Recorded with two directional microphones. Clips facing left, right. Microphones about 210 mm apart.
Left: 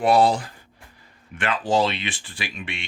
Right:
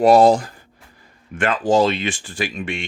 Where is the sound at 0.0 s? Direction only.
45° right (ahead or behind).